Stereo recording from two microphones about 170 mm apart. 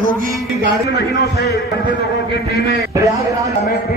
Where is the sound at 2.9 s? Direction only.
20° right (ahead or behind).